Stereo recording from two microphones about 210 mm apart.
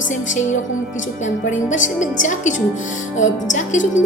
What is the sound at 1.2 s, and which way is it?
A woman's voice, 35° left (ahead or behind).